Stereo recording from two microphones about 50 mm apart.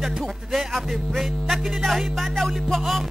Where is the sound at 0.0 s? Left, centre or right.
Centre.